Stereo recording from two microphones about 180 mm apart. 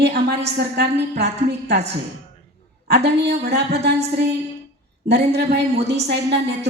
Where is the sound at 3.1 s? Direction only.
65° right (ahead or behind).